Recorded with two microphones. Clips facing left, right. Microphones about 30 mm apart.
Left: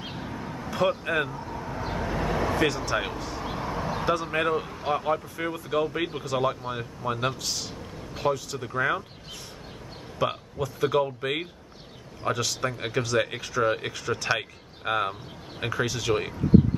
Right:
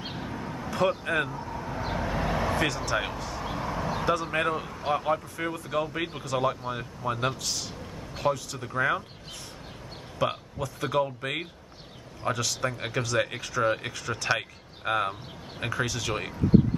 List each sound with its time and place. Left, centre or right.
0.0 s speech: centre
10.1 s speech: centre